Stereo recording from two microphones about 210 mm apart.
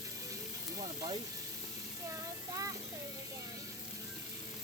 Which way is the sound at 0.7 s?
20° right (ahead or behind).